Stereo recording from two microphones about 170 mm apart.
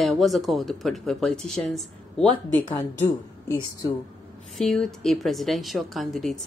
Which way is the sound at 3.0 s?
15° left (ahead or behind).